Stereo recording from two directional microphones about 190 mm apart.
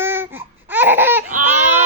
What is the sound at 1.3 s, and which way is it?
Baby cry, 40° right (ahead or behind).